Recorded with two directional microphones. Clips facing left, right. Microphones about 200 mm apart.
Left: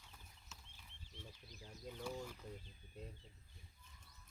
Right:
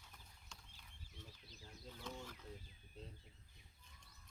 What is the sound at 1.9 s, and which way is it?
Speech, 10° left (ahead or behind).